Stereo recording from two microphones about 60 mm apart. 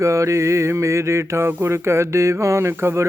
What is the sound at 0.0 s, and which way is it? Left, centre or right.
Speech, right.